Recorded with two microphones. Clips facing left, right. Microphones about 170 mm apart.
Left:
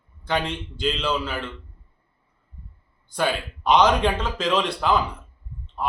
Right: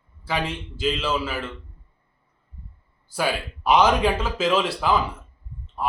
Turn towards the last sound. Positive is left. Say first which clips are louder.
# right 1 dB
turn(degrees=0)  # may be behind; listen again after turning